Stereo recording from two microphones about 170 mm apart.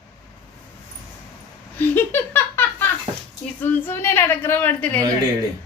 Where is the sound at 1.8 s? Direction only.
10° left (ahead or behind).